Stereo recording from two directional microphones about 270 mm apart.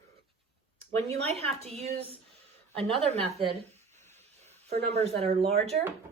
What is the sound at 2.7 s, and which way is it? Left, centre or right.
Speech, centre.